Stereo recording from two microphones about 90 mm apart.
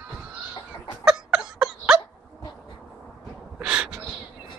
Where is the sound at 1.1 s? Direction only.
10° right (ahead or behind).